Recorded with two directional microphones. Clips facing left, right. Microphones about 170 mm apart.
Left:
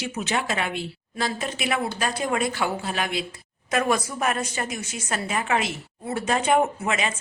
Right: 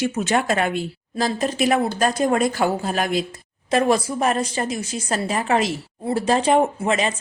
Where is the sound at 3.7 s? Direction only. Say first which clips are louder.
Right 5 dB; 30° right (ahead or behind).